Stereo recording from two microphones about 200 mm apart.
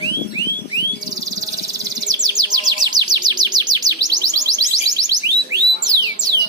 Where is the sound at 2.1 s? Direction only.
20° right (ahead or behind).